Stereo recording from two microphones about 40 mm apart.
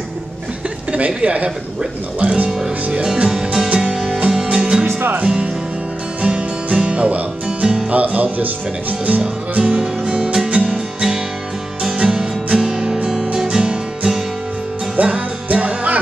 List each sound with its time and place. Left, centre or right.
0.9 s a woman's voice: right
2.9 s speech: right
3.3 s music: centre
3.6 s music: right
3.9 s music: centre
4.8 s music: right
5.2 s music: right
7.9 s music: right
9.2 s music: right
15.0 s music: right